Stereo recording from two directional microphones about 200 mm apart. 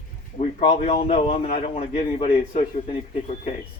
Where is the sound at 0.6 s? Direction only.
30° left (ahead or behind).